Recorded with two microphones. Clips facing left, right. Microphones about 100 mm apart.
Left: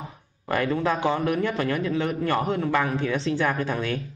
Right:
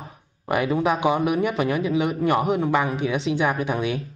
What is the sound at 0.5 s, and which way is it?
A woman's voice, 15° right (ahead or behind).